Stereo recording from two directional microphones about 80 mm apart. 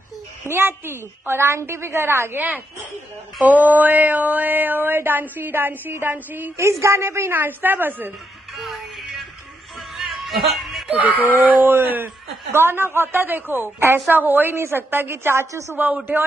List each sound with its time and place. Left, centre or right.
0.5 s a woman's voice: right
3.4 s mantra: right
6.5 s mantra: right
8.5 s music: centre
10.9 s mantra: centre